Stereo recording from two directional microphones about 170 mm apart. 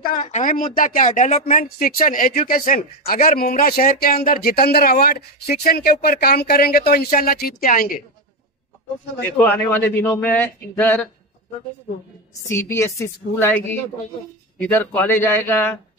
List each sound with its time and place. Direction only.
0.0 s speech: 50° left (ahead or behind)
9.4 s a man's voice: 10° left (ahead or behind)
12.4 s a man's voice: 15° left (ahead or behind)